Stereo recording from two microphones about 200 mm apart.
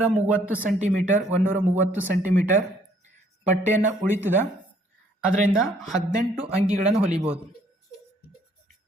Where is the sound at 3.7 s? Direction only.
40° right (ahead or behind).